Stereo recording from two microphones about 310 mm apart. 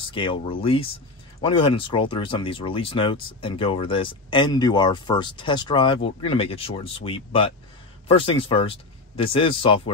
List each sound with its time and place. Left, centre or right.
0.0 s speech: centre